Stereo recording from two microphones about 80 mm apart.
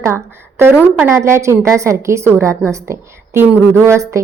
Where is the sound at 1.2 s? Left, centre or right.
Right.